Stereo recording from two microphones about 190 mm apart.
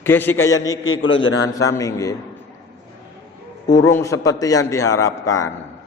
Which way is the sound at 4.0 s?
15° left (ahead or behind).